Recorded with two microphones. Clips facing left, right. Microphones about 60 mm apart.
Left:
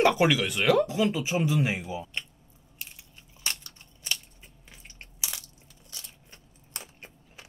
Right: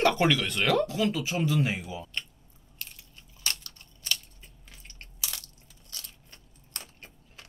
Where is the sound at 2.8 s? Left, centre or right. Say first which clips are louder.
Even; centre.